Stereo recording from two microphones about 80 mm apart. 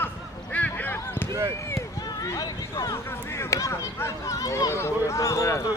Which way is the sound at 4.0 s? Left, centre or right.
Left.